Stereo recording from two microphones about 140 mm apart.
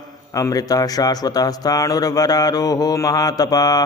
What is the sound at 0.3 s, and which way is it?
Speech, 25° left (ahead or behind).